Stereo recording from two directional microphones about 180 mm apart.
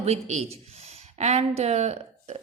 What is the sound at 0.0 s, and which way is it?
A woman's voice, 40° right (ahead or behind).